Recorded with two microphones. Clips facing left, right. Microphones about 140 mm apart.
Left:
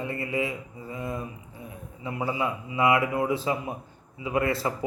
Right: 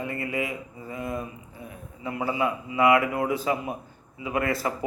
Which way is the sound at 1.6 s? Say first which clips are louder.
Right 1 dB; 25° left (ahead or behind).